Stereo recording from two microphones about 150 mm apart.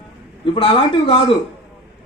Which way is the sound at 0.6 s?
35° left (ahead or behind).